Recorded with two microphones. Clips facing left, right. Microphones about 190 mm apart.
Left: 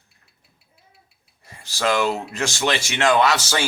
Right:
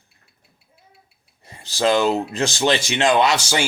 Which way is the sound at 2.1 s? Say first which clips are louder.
Right 4 dB; 20° right (ahead or behind).